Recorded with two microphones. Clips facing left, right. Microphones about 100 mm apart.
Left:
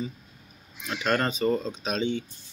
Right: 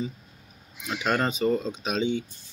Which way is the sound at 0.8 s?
10° right (ahead or behind).